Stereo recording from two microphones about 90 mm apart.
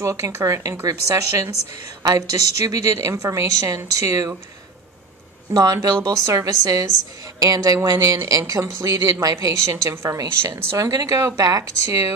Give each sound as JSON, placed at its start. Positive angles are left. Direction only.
{"t": 0.0, "sound": "speech", "side_deg": -30}
{"t": 5.5, "sound": "speech", "side_deg": -45}